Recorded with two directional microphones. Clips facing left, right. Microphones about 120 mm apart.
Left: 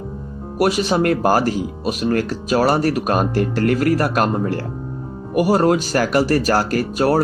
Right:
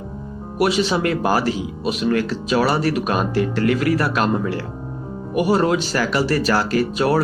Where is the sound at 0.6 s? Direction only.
45° left (ahead or behind).